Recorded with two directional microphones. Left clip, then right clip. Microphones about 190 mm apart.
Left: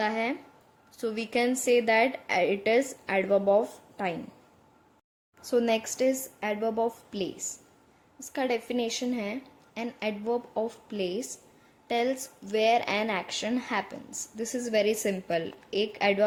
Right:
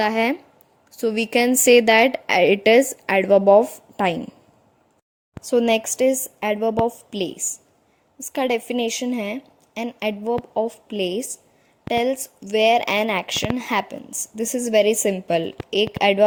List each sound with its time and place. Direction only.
0.0 s speech: 45° right (ahead or behind)
5.4 s speech: 45° right (ahead or behind)